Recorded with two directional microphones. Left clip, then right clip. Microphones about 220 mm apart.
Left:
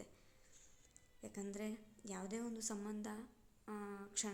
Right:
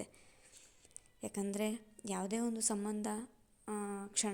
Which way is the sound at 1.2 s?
30° right (ahead or behind).